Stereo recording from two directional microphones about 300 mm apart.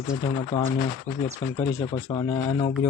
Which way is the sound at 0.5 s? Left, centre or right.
Centre.